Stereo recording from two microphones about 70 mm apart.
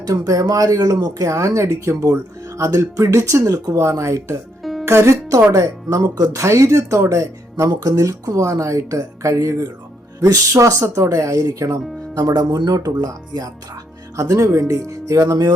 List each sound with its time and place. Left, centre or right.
0.0 s speech: right
1.2 s speech: right
4.6 s music: centre
4.9 s speech: right
7.7 s speech: right
12.1 s speech: right
14.2 s speech: right